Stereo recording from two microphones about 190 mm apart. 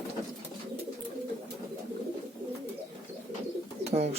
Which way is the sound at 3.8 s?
35° right (ahead or behind).